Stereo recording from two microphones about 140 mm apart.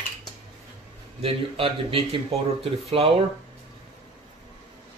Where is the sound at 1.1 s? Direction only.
40° right (ahead or behind).